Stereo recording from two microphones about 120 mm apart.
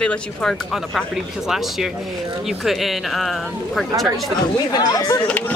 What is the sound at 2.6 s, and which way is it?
Speech, centre (ahead or behind).